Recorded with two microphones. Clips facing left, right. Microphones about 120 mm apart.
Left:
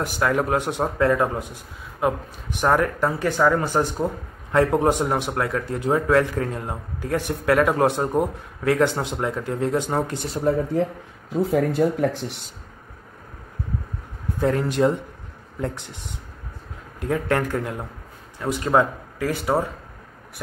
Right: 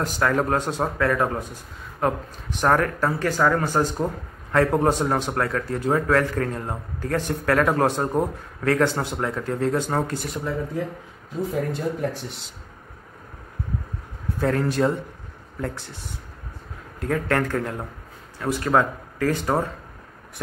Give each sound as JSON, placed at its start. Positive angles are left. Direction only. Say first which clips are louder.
{"t": 0.0, "sound": "speech", "louder": "even", "side_deg": 15}
{"t": 10.1, "sound": "speech", "louder": "left 1 dB", "side_deg": 25}
{"t": 10.4, "sound": "speech", "louder": "left 9 dB", "side_deg": 55}
{"t": 11.5, "sound": "speech", "louder": "left 7 dB", "side_deg": 65}
{"t": 14.4, "sound": "speech", "louder": "left 1 dB", "side_deg": 15}